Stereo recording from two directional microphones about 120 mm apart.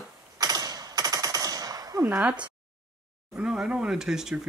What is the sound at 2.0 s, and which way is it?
Speech, 10° right (ahead or behind).